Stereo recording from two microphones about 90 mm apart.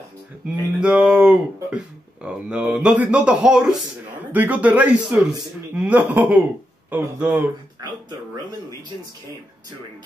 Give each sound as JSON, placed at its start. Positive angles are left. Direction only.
{"t": 0.7, "sound": "speech", "side_deg": -10}
{"t": 4.3, "sound": "speech", "side_deg": -15}